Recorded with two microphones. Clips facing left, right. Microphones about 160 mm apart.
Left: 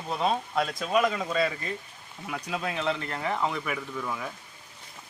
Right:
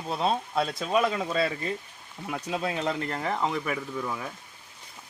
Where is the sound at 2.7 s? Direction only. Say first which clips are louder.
Right 1 dB; 40° right (ahead or behind).